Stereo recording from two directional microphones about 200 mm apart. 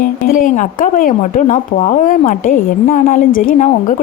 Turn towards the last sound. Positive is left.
turn(degrees=35)  # may be behind; listen again after turning